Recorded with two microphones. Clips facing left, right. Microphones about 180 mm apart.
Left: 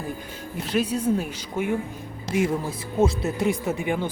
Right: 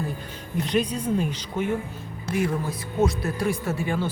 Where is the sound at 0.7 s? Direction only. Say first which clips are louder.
Left 2 dB; 5° left (ahead or behind).